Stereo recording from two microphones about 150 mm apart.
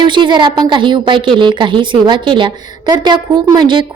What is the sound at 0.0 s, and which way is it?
A woman's voice, 30° right (ahead or behind).